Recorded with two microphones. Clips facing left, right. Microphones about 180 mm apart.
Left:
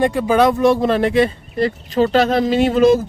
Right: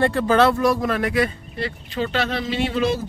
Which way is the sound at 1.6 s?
40° left (ahead or behind).